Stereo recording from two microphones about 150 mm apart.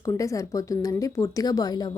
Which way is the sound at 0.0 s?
20° left (ahead or behind).